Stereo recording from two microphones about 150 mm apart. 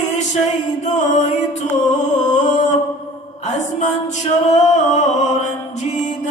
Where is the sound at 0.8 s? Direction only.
50° left (ahead or behind).